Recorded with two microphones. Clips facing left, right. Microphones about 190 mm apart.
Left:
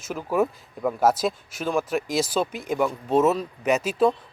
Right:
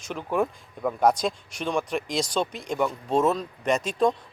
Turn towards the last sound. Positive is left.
turn(degrees=5)  # may be behind; listen again after turning